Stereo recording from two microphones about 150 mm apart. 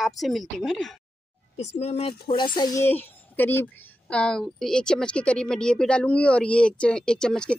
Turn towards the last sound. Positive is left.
turn(degrees=5)  # may be behind; listen again after turning